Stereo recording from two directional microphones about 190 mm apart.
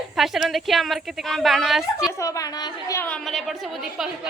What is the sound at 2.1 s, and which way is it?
Speech, 15° left (ahead or behind).